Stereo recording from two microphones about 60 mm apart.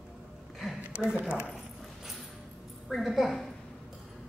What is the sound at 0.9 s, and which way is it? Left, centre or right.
Speech, centre.